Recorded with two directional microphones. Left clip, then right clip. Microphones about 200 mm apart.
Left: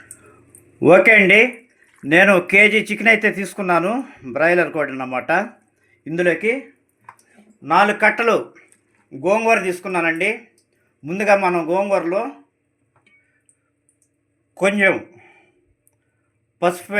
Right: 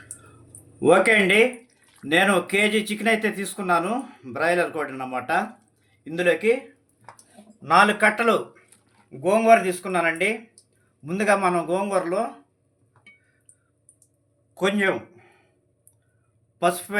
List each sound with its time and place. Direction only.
0.8 s speech: 35° left (ahead or behind)
7.6 s speech: 25° left (ahead or behind)
14.5 s a sound: 35° left (ahead or behind)
16.6 s speech: 30° left (ahead or behind)